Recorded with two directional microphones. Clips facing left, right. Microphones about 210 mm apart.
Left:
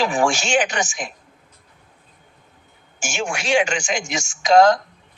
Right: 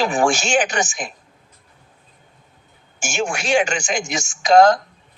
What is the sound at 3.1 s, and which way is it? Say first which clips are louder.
A man's voice: right 1 dB; 45° right (ahead or behind).